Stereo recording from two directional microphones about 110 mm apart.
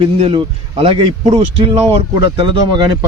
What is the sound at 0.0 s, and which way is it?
A man's voice, 55° right (ahead or behind).